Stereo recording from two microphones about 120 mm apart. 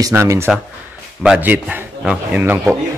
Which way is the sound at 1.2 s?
10° right (ahead or behind).